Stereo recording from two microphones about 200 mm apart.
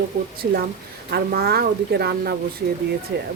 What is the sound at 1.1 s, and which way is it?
Speech, 50° right (ahead or behind).